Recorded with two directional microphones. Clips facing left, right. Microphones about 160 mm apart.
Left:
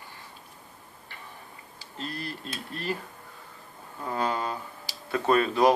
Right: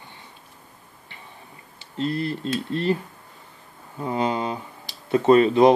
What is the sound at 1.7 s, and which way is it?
Speech, 30° right (ahead or behind).